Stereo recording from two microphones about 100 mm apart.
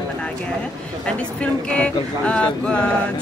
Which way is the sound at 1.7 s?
10° left (ahead or behind).